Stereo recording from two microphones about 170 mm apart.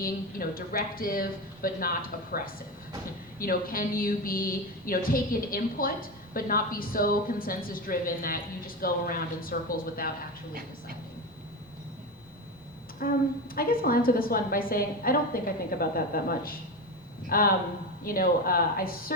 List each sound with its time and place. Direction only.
0.0 s speech: 60° left (ahead or behind)
10.5 s speech: 60° right (ahead or behind)
13.0 s speech: 55° left (ahead or behind)